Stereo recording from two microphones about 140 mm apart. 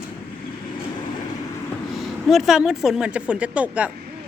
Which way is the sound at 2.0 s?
Centre (ahead or behind).